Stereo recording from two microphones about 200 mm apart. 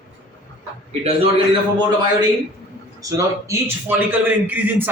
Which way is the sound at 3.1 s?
15° right (ahead or behind).